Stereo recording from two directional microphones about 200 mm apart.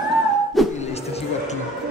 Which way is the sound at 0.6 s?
Centre (ahead or behind).